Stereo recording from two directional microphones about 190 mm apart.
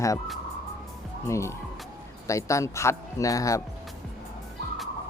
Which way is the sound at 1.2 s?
15° left (ahead or behind).